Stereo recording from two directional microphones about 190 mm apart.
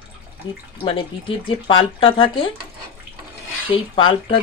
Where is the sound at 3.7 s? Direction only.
25° left (ahead or behind).